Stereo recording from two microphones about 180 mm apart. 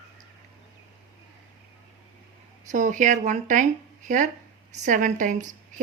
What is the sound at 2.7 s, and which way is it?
A woman's voice, 45° right (ahead or behind).